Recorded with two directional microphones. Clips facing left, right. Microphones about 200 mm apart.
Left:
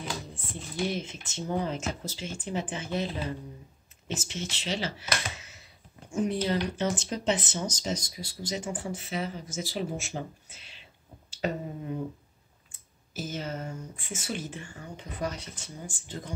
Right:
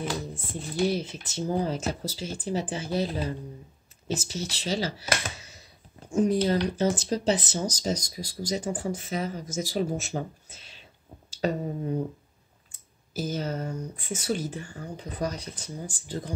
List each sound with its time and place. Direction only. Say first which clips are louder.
0.3 s speech: right 5 dB; 40° right (ahead or behind)
13.1 s speech: right 5 dB; 40° right (ahead or behind)